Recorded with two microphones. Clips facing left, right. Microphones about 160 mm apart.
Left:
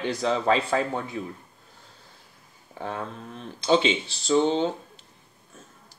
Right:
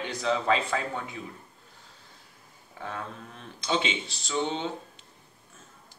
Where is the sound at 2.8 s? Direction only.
30° left (ahead or behind).